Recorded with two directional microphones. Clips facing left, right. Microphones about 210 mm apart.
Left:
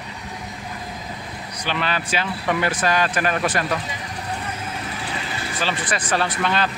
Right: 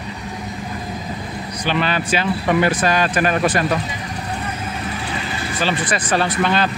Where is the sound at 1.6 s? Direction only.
20° right (ahead or behind).